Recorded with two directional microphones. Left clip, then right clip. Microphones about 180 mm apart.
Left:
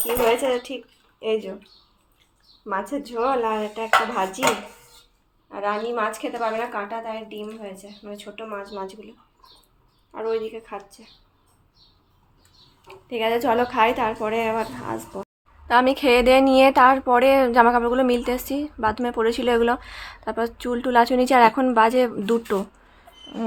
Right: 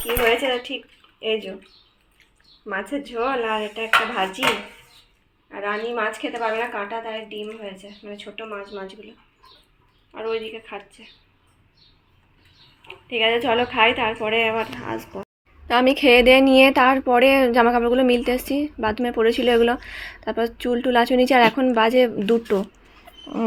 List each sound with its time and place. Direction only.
0.0 s a woman's voice: 5° left (ahead or behind)
2.6 s a woman's voice: 5° left (ahead or behind)
5.5 s a woman's voice: 5° left (ahead or behind)
13.1 s a woman's voice: 5° left (ahead or behind)
23.1 s a sound: 45° right (ahead or behind)